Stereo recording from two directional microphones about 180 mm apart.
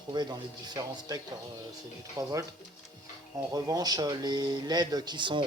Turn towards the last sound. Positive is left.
turn(degrees=-25)  # may be behind; listen again after turning